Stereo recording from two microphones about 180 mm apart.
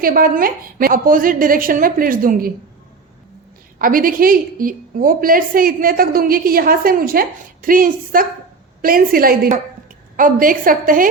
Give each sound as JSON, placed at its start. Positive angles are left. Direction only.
{"t": 0.0, "sound": "a woman's voice", "side_deg": -50}
{"t": 3.8, "sound": "a woman's voice", "side_deg": -50}